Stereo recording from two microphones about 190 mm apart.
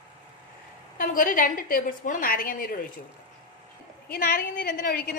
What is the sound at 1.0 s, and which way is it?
A woman's voice, 45° left (ahead or behind).